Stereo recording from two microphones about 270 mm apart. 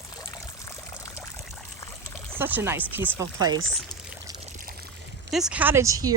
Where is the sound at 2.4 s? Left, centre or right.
Centre.